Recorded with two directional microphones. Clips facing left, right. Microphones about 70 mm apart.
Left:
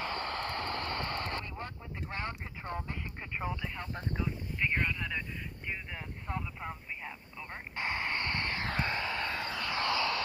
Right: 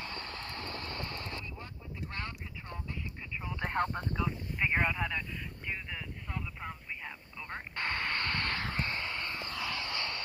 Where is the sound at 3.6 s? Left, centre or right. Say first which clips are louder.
Right 9 dB; right.